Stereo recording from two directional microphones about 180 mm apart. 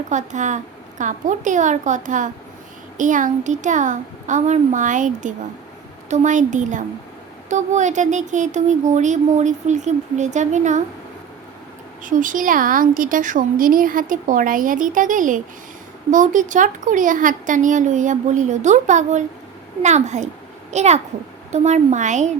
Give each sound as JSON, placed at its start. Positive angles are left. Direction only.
{"t": 0.1, "sound": "a woman's voice", "side_deg": -40}
{"t": 12.0, "sound": "a woman's voice", "side_deg": -45}